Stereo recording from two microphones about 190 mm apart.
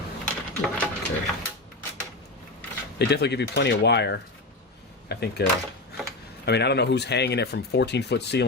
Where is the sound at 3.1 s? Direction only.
60° left (ahead or behind).